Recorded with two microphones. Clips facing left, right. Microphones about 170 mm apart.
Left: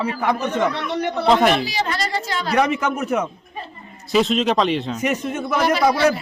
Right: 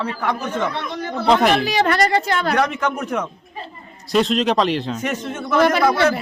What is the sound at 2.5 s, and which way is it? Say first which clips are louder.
A man's voice: left 6 dB; 5° left (ahead or behind).